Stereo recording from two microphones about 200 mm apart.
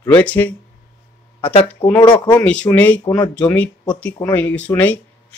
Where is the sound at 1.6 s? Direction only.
5° left (ahead or behind).